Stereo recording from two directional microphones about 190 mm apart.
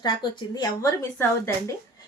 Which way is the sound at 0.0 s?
20° left (ahead or behind).